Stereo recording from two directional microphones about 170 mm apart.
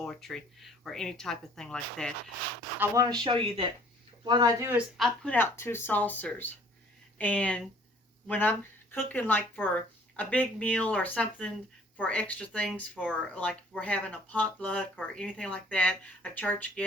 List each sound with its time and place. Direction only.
0.0 s speech: 5° left (ahead or behind)
2.7 s speech: 15° right (ahead or behind)
4.9 s speech: 5° left (ahead or behind)